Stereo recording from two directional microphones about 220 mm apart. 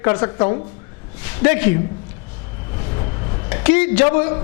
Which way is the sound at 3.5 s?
15° left (ahead or behind).